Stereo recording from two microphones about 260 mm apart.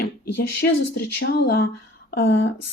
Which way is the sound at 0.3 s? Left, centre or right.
Left.